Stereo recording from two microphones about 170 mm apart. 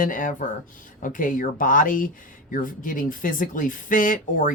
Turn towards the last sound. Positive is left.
turn(degrees=50)  # may be behind; listen again after turning